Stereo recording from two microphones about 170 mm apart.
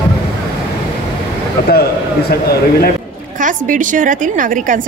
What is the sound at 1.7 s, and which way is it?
Speech, 65° left (ahead or behind).